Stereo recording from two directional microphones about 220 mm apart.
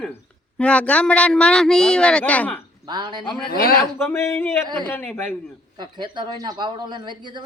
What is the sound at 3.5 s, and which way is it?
Speech, 45° left (ahead or behind).